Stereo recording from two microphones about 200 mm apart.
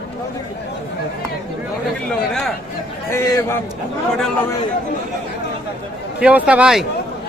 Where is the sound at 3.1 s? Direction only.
10° left (ahead or behind).